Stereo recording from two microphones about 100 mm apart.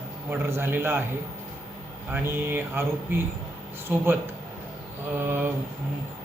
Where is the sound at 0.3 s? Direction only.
25° right (ahead or behind).